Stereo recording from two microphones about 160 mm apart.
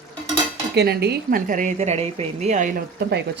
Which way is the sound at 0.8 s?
90° right.